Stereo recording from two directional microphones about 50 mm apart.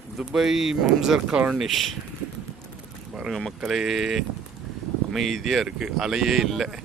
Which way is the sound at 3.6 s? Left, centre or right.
Centre.